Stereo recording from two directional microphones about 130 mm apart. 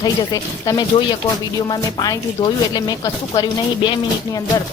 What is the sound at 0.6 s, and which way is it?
A woman's voice, 30° left (ahead or behind).